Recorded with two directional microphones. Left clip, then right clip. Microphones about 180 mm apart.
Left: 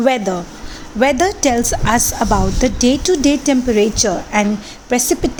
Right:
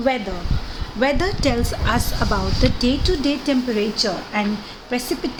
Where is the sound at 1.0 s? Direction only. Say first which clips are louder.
Left 6 dB; 40° left (ahead or behind).